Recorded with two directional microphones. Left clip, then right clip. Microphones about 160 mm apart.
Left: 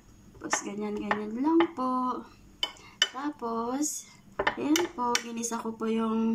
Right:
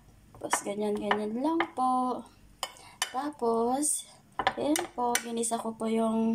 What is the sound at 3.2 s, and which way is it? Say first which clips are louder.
Dishes: right 4 dB; 35° right (ahead or behind).